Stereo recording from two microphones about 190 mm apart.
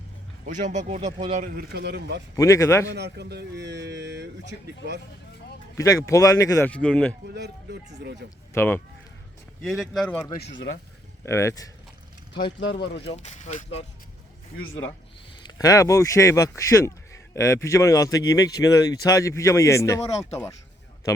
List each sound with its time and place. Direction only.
0.4 s speech: 40° right (ahead or behind); by 2.2 s 60° right (ahead or behind)
2.3 s speech: 15° left (ahead or behind)
2.9 s speech: 60° right (ahead or behind)
5.7 s speech: 15° left (ahead or behind)
7.3 s speech: 60° right (ahead or behind)
8.5 s speech: 10° left (ahead or behind)
9.6 s speech: centre (ahead or behind)
10.4 s speech: 75° left (ahead or behind)
11.3 s speech: 15° left (ahead or behind)
12.5 s speech: 65° left (ahead or behind)
13.1 s speech: 35° left (ahead or behind)
15.4 s speech: 20° left (ahead or behind)